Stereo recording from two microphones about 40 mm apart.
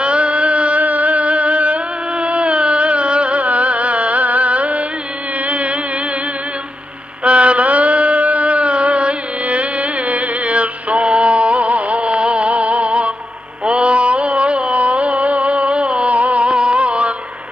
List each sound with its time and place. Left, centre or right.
0.0 s music: right
7.2 s mantra: right